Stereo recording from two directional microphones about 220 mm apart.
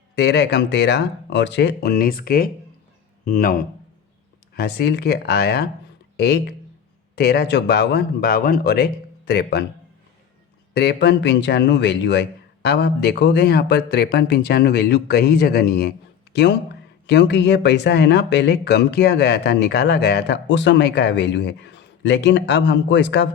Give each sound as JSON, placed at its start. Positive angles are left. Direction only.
{"t": 0.2, "sound": "speech", "side_deg": 50}
{"t": 10.8, "sound": "speech", "side_deg": 50}